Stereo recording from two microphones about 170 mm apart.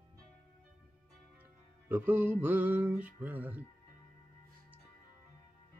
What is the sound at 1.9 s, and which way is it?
Music, 10° right (ahead or behind).